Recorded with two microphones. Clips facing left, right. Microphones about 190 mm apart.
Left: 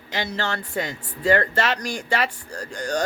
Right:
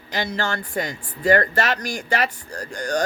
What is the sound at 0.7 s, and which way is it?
Speech, 25° left (ahead or behind).